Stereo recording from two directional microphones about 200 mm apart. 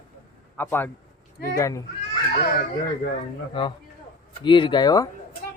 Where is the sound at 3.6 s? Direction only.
25° left (ahead or behind).